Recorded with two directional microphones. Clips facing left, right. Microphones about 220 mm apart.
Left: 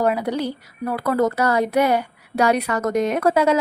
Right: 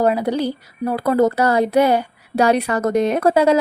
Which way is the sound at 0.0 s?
30° right (ahead or behind).